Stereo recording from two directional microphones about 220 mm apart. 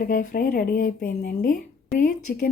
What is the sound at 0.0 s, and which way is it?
Speech, 35° left (ahead or behind).